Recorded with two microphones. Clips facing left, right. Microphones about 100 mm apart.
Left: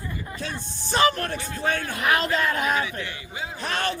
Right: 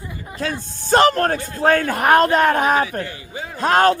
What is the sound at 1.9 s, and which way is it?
A man's voice, 50° right (ahead or behind).